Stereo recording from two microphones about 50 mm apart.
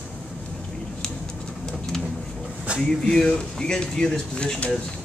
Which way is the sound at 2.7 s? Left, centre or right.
Right.